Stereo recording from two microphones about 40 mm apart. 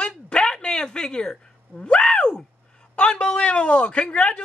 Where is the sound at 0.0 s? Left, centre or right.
Centre.